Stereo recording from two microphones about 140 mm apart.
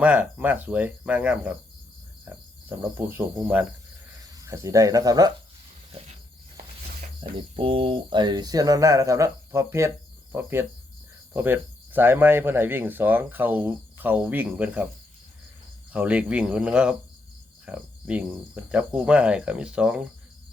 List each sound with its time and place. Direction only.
0.0 s speech: 10° right (ahead or behind)
2.2 s cricket: 15° right (ahead or behind)
4.3 s speech: 25° right (ahead or behind)
7.2 s speech: 40° right (ahead or behind); by 14.8 s 10° right (ahead or behind)
15.9 s speech: 10° right (ahead or behind)